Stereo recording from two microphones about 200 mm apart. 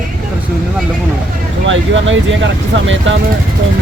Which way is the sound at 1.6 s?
70° right (ahead or behind).